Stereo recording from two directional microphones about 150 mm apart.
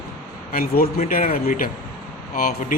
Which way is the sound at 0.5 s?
80° left.